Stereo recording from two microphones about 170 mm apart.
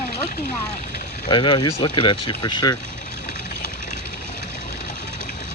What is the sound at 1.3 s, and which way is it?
Speech, 25° left (ahead or behind).